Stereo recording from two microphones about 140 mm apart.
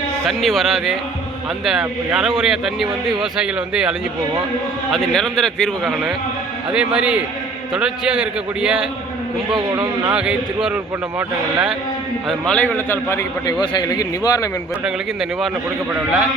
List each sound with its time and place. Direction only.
0.3 s a man's voice: centre (ahead or behind)
6.7 s a man's voice: 10° right (ahead or behind)
9.6 s speech: 30° right (ahead or behind)
10.1 s a man's voice: 5° right (ahead or behind)
12.3 s a man's voice: 5° left (ahead or behind); by 14.5 s 25° left (ahead or behind)
14.8 s a man's voice: 5° right (ahead or behind)